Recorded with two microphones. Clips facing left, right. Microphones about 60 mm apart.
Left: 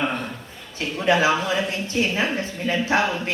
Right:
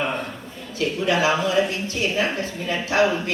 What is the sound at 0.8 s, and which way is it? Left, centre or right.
A woman's voice, left.